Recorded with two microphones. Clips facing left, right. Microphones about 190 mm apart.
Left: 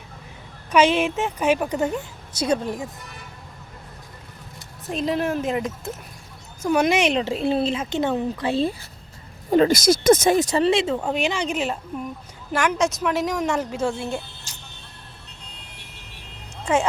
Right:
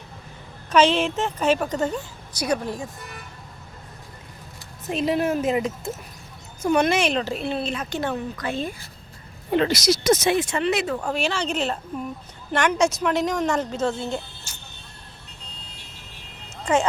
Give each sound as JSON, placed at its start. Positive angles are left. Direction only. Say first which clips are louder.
{"t": 0.7, "sound": "a woman's voice", "louder": "left 1 dB", "side_deg": 10}
{"t": 4.9, "sound": "speech", "louder": "right 1 dB", "side_deg": -5}
{"t": 6.8, "sound": "speech", "louder": "left 2 dB", "side_deg": 15}
{"t": 9.5, "sound": "a woman's voice", "louder": "left 4 dB", "side_deg": 45}